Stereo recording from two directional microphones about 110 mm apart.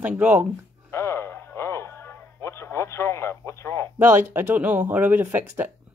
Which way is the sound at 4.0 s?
20° right (ahead or behind).